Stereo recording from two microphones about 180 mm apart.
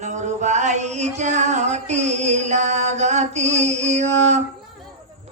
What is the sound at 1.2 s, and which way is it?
Music, 40° right (ahead or behind).